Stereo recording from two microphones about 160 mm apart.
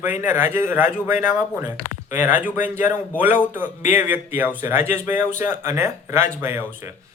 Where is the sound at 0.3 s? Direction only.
15° right (ahead or behind).